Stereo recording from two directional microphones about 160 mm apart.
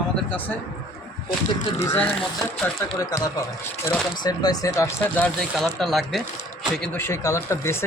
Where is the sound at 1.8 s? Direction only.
15° left (ahead or behind).